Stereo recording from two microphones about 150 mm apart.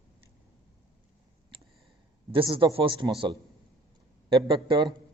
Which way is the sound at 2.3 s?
35° right (ahead or behind).